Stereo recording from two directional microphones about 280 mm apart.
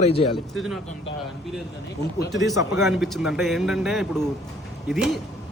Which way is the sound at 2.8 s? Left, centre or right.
Centre.